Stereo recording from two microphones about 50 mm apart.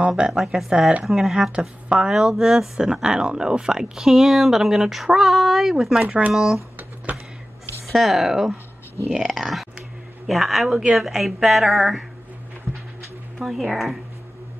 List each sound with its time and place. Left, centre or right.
0.3 s a woman's voice: centre
1.9 s speech: centre
2.1 s speech: centre
6.0 s speech: right
6.3 s speech: centre
7.1 s a sound: right
7.8 s a woman's voice: centre
12.7 s a sound: left
13.4 s a woman's voice: centre